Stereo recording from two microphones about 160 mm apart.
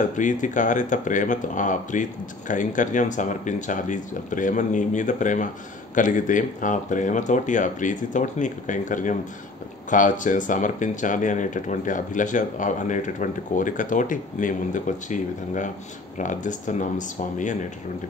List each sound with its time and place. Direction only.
0.1 s speech: 50° left (ahead or behind)